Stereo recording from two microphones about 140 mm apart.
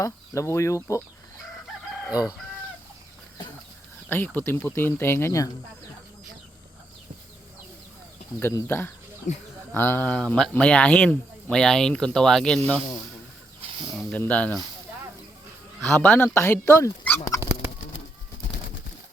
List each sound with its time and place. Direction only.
0.0 s speech: 20° left (ahead or behind)
2.1 s speech: 30° left (ahead or behind)
4.1 s speech: 15° left (ahead or behind)
8.4 s speech: 15° left (ahead or behind)
9.3 s speech: 60° left (ahead or behind)
9.7 s speech: 15° left (ahead or behind)
14.1 s speech: 10° left (ahead or behind)
15.9 s speech: 10° left (ahead or behind)
17.2 s a sound: 25° left (ahead or behind)